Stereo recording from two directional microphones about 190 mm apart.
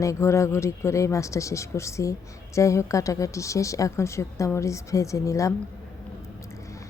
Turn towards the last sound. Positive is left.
turn(degrees=15)  # may be behind; listen again after turning